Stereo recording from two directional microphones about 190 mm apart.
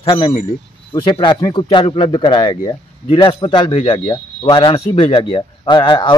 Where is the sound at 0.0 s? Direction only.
25° left (ahead or behind).